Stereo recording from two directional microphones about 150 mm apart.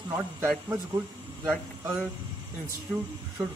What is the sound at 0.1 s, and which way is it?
A man's voice, 15° right (ahead or behind).